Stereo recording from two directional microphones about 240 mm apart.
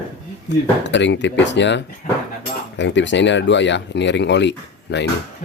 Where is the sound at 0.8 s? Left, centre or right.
Left.